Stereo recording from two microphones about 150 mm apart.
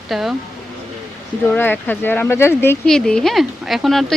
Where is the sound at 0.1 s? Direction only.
Centre (ahead or behind).